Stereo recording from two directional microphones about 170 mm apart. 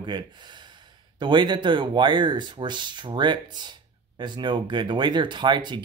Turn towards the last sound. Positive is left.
turn(degrees=-25)  # may be behind; listen again after turning